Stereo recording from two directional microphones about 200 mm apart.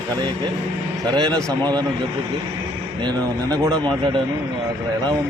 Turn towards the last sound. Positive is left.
turn(degrees=-20)  # may be behind; listen again after turning